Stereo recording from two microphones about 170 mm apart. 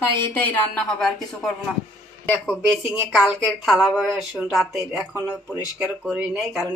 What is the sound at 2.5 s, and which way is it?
Speech, centre (ahead or behind).